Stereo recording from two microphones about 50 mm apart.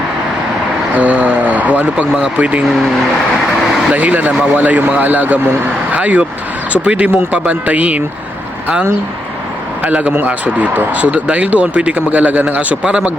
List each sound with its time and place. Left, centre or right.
0.9 s vehicle: right
2.4 s speech: right
3.9 s a man's voice: right
9.8 s speech: right